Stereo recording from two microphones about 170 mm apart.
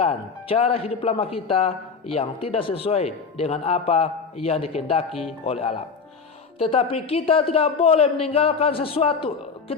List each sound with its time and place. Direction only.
0.0 s speech: 35° left (ahead or behind)